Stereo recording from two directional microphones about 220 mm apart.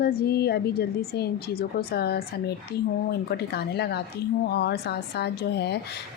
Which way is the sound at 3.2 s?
45° left (ahead or behind).